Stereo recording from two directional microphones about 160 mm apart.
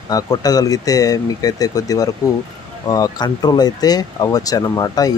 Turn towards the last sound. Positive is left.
turn(degrees=25)  # may be behind; listen again after turning